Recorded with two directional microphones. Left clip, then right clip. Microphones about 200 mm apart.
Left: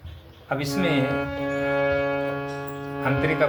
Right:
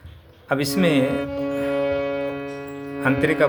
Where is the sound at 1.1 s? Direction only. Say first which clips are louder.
Right 1 dB; 10° right (ahead or behind).